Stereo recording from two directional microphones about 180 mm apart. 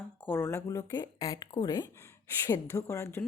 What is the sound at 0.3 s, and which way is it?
Speech, 15° left (ahead or behind).